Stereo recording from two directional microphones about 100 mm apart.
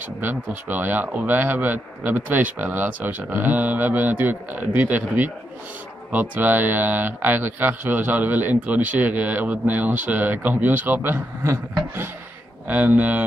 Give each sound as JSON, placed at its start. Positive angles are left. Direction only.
{"t": 0.2, "sound": "speech", "side_deg": -20}